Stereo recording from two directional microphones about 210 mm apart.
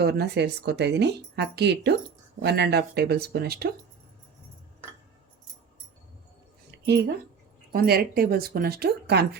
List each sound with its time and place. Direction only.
0.0 s a woman's voice: 50° right (ahead or behind)
6.7 s a sound: 55° right (ahead or behind)
7.7 s a woman's voice: 45° right (ahead or behind)